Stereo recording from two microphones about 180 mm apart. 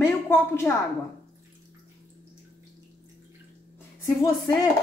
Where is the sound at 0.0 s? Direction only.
15° left (ahead or behind).